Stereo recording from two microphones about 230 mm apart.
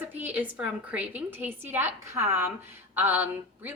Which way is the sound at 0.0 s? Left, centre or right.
Centre.